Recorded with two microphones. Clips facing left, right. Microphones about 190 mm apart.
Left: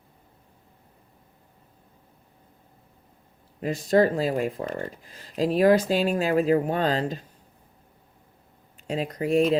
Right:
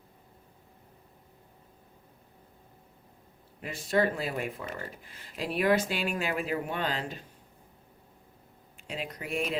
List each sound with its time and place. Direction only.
3.6 s speech: 40° left (ahead or behind)
8.9 s speech: 40° left (ahead or behind)